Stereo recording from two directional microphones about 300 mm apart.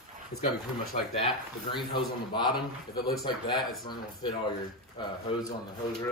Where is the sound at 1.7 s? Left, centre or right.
Centre.